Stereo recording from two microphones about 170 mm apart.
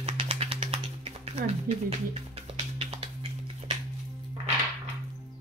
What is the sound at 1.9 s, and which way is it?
Speech, 35° right (ahead or behind).